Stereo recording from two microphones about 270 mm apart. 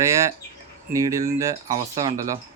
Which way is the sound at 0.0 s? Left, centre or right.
Centre.